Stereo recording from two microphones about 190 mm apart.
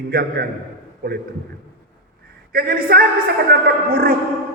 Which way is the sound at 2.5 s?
50° right (ahead or behind).